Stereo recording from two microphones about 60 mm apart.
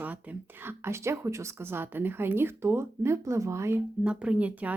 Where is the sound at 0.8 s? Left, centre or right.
Right.